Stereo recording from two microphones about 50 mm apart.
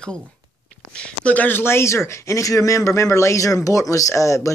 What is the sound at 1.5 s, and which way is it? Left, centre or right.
Speech, left.